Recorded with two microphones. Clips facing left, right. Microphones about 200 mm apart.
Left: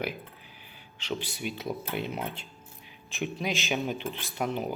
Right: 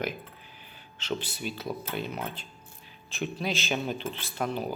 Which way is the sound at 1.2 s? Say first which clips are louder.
Left 1 dB; 15° left (ahead or behind).